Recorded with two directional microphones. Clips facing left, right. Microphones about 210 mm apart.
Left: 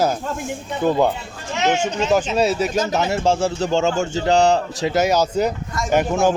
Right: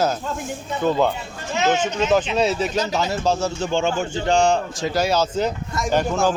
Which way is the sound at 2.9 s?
20° left (ahead or behind).